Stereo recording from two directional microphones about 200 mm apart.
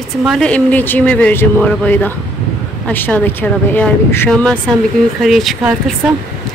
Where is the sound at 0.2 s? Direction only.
Centre (ahead or behind).